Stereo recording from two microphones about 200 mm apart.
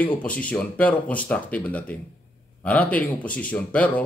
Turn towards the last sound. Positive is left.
turn(degrees=5)  # may be behind; listen again after turning